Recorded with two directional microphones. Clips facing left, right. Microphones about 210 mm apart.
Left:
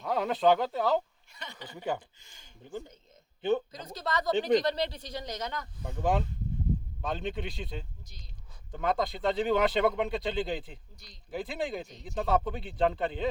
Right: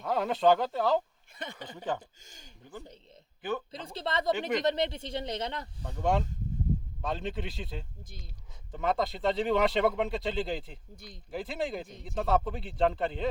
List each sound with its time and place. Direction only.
0.0 s speech: centre (ahead or behind)
1.4 s speech: 50° right (ahead or behind)
1.6 s speech: 10° left (ahead or behind)
2.0 s speech: 40° right (ahead or behind)
3.7 s speech: 30° right (ahead or behind)
5.8 s speech: 5° left (ahead or behind)
10.9 s speech: 55° right (ahead or behind)
11.3 s speech: centre (ahead or behind)